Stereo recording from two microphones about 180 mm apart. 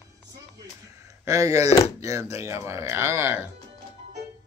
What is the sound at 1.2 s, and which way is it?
Speech, 15° right (ahead or behind).